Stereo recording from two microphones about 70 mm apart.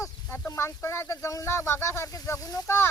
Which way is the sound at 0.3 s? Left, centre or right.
Left.